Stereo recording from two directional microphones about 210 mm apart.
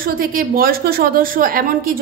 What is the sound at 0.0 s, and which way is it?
A woman's voice, 40° right (ahead or behind).